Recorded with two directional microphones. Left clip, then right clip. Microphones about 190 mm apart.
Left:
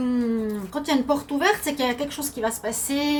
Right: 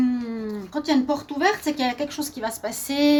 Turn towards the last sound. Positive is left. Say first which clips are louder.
# right 3 dB
turn(degrees=-60)  # may be behind; listen again after turning